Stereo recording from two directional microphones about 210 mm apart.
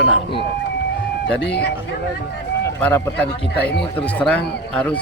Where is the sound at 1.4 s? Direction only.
55° left (ahead or behind).